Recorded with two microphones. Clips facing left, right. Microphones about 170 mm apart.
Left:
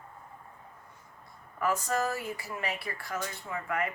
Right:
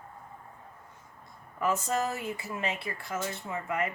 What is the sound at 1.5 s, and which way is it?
Speech, 20° right (ahead or behind).